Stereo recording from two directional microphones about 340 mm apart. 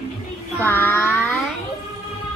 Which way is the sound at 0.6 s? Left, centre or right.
Centre.